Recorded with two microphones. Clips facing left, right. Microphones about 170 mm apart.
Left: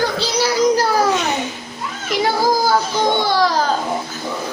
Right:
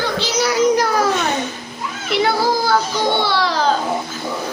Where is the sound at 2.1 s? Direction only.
40° left (ahead or behind).